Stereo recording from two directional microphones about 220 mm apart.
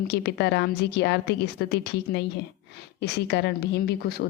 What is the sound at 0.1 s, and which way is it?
A woman's voice, 50° left (ahead or behind).